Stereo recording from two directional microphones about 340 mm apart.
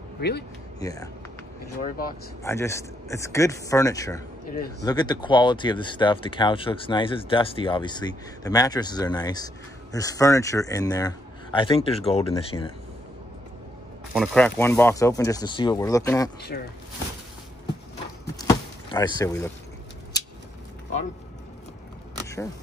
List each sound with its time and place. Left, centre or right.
0.2 s speech: left
0.7 s speech: centre
2.4 s speech: centre
14.1 s speech: centre
16.5 s speech: left
18.2 s power windows: centre
22.2 s single-lens reflex camera: centre